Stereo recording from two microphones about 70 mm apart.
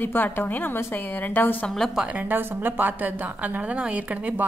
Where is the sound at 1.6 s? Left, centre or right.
Centre.